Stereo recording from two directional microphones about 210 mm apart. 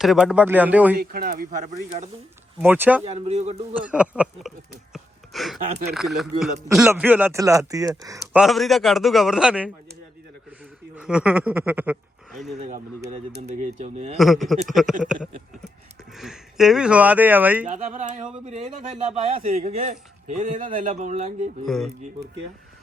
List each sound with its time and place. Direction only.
0.0 s speech: centre (ahead or behind)
0.9 s a man's voice: 45° right (ahead or behind)
2.6 s speech: 10° right (ahead or behind)
3.0 s a man's voice: 30° right (ahead or behind)
3.8 s a man's voice: 5° right (ahead or behind)
8.4 s a man's voice: centre (ahead or behind)
10.9 s speech: 5° right (ahead or behind)
12.5 s a man's voice: 35° right (ahead or behind)
14.2 s a man's voice: centre (ahead or behind)
17.7 s a man's voice: 35° right (ahead or behind)